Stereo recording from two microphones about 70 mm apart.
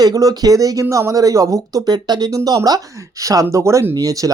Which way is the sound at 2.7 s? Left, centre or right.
Right.